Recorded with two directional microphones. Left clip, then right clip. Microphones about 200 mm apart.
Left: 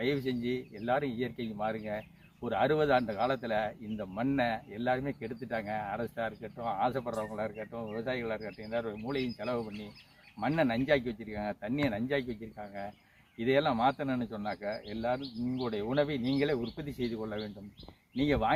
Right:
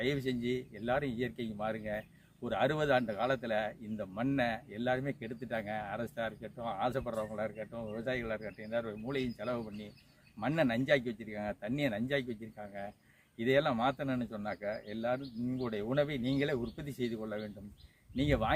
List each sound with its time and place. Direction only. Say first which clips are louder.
0.0 s speech: left 2 dB; 15° right (ahead or behind)